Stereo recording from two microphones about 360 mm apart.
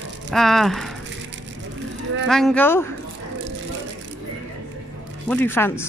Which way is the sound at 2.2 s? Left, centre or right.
Centre.